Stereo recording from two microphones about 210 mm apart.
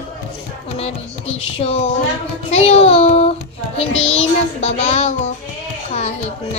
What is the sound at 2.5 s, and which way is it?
Child singing, 30° left (ahead or behind).